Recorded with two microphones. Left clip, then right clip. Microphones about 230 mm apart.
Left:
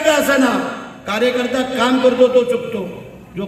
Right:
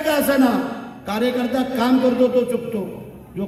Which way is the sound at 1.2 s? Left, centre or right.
Right.